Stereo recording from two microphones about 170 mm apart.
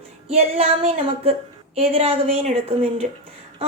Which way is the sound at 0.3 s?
35° right (ahead or behind).